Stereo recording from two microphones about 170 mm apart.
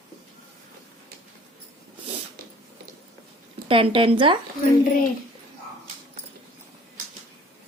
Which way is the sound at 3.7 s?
30° right (ahead or behind).